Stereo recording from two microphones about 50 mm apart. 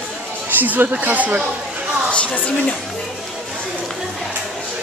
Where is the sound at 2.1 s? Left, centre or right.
Left.